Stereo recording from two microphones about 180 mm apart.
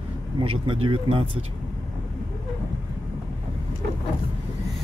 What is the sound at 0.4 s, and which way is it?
Speech, 30° right (ahead or behind).